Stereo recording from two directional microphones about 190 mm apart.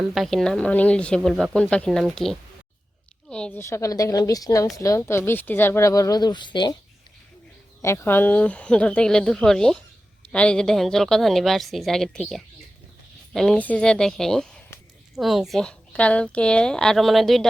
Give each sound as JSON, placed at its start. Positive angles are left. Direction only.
{"t": 0.0, "sound": "speech", "side_deg": 0}
{"t": 7.8, "sound": "speech", "side_deg": 15}